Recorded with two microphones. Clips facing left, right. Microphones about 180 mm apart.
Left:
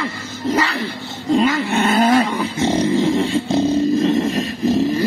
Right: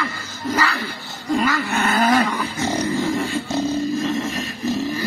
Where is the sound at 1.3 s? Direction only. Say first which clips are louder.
Left 4 dB; 25° left (ahead or behind).